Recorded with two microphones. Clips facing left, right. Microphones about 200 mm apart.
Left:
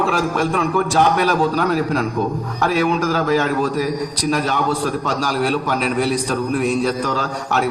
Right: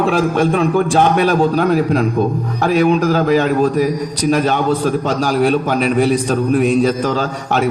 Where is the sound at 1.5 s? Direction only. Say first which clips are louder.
Right 4 dB; 55° right (ahead or behind).